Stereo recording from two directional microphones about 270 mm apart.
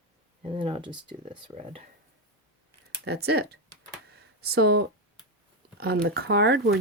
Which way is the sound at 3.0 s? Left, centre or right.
Right.